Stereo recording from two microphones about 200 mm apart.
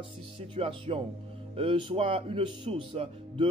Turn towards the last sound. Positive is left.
turn(degrees=-30)  # may be behind; listen again after turning